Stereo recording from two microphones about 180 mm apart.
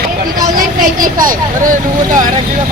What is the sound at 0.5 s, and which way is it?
Vehicle, 50° right (ahead or behind).